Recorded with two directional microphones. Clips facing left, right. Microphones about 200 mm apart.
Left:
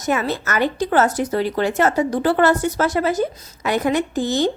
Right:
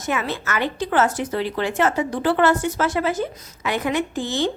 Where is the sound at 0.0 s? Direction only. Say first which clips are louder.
Left 4 dB; 40° left (ahead or behind).